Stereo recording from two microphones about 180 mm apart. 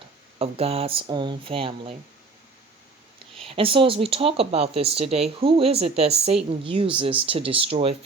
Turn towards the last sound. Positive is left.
turn(degrees=-30)  # may be behind; listen again after turning